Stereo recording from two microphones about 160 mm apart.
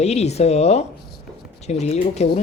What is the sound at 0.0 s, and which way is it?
Speech, 40° left (ahead or behind).